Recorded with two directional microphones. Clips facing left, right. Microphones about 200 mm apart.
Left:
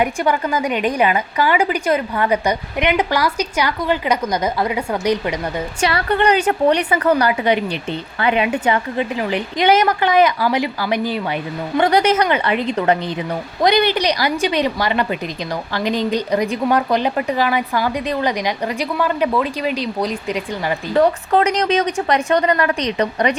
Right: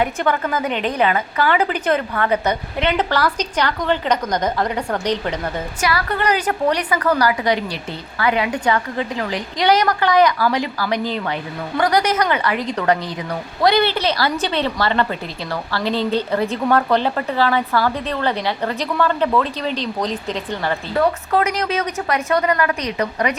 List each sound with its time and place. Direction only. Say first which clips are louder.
0.0 s a woman's voice: left 1 dB; 10° left (ahead or behind)
5.8 s a woman's voice: left 4 dB; 30° left (ahead or behind)
11.8 s a woman's voice: left 3 dB; 25° left (ahead or behind)
20.9 s a woman's voice: left 4 dB; 30° left (ahead or behind)